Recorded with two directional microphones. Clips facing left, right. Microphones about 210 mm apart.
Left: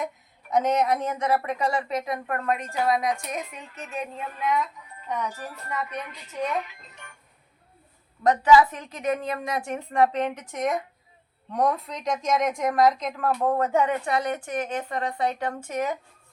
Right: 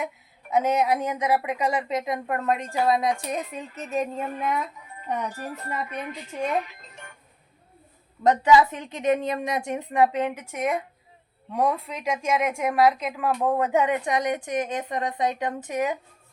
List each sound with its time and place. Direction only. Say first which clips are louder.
0.5 s a woman's voice: even; 5° right (ahead or behind); by 4.6 s 50° right (ahead or behind)
6.1 s a woman's voice: right 2 dB; 45° right (ahead or behind)
8.2 s a woman's voice: even; 20° right (ahead or behind)
9.9 s speech: even; 10° right (ahead or behind)